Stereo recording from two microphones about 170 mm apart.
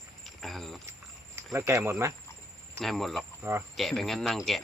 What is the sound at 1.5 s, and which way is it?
Speech, 15° right (ahead or behind).